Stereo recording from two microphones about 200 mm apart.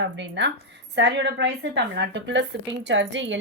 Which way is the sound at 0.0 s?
60° right (ahead or behind).